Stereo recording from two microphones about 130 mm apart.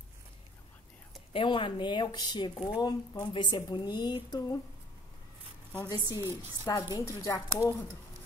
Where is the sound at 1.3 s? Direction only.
40° left (ahead or behind).